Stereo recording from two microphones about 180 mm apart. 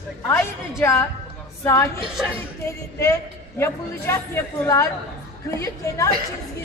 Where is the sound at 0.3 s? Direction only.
15° left (ahead or behind).